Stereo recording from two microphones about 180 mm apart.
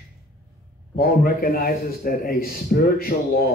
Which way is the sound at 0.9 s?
55° left (ahead or behind).